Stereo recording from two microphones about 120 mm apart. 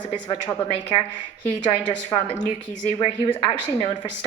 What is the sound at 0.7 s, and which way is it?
Speech, 50° left (ahead or behind).